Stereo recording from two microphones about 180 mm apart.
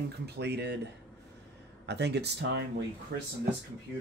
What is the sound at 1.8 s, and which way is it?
Speech, 70° right (ahead or behind).